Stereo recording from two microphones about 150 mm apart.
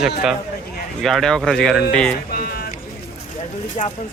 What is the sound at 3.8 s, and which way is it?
Speech, 45° left (ahead or behind).